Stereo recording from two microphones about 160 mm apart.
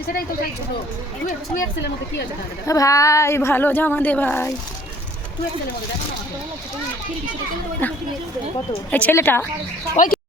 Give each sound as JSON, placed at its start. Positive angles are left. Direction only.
{"t": 1.5, "sound": "speech", "side_deg": 90}
{"t": 2.6, "sound": "speech", "side_deg": 20}
{"t": 7.8, "sound": "speech", "side_deg": 10}
{"t": 9.9, "sound": "speech", "side_deg": 55}